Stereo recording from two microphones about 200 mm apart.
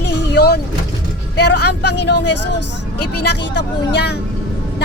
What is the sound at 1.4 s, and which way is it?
A woman's voice, 55° left (ahead or behind).